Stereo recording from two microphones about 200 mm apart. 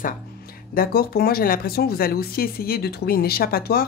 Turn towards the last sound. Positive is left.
turn(degrees=50)  # may be behind; listen again after turning